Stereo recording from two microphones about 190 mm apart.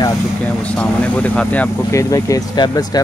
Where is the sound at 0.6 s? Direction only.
5° left (ahead or behind).